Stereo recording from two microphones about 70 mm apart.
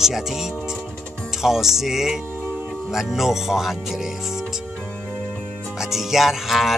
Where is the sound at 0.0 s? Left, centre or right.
Centre.